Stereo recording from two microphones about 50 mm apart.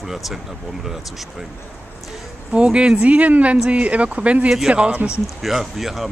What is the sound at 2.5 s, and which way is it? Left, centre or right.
Speech, centre.